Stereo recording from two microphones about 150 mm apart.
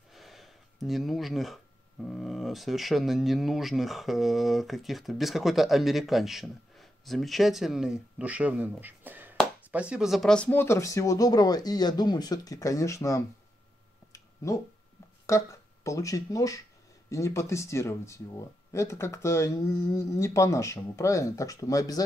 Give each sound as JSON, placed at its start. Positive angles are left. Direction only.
{"t": 0.1, "sound": "speech", "side_deg": 0}
{"t": 14.1, "sound": "a sound", "side_deg": 20}
{"t": 15.2, "sound": "speech", "side_deg": 20}